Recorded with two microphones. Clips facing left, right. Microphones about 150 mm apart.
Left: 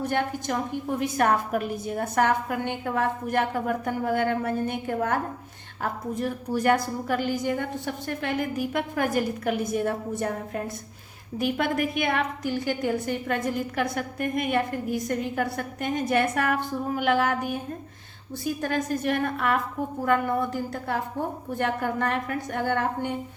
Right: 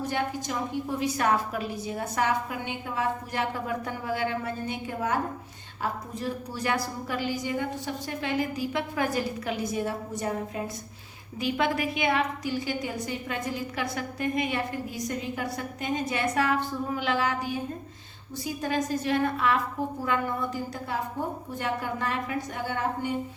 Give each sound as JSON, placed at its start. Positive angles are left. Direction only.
{"t": 0.0, "sound": "a woman's voice", "side_deg": 55}